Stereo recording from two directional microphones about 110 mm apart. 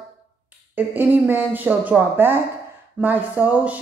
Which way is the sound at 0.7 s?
20° right (ahead or behind).